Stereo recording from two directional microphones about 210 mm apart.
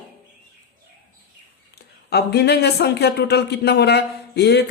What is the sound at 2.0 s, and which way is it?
Speech, 50° left (ahead or behind).